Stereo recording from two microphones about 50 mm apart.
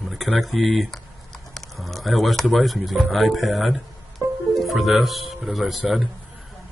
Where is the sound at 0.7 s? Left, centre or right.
Centre.